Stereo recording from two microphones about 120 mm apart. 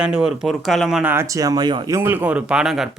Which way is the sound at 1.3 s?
30° right (ahead or behind).